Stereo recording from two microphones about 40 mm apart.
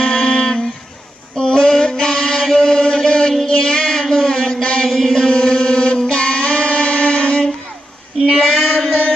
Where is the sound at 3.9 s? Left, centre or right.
Centre.